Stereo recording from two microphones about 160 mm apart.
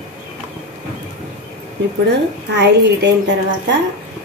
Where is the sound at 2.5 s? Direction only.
90° right.